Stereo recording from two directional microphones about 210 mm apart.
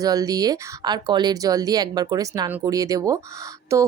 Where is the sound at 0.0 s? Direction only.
15° right (ahead or behind).